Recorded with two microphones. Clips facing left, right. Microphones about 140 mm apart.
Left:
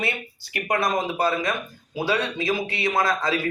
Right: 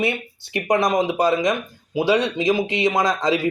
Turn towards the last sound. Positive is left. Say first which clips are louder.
# right 4 dB
turn(degrees=-15)  # may be behind; listen again after turning